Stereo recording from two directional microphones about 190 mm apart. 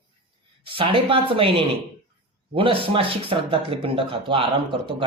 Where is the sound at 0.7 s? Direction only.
25° right (ahead or behind).